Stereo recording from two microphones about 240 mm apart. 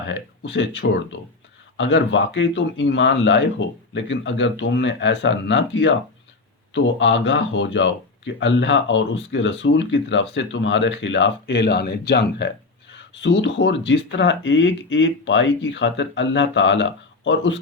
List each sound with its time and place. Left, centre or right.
0.1 s speech: left